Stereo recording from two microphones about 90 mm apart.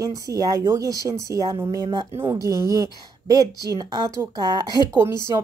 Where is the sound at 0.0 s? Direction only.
40° right (ahead or behind).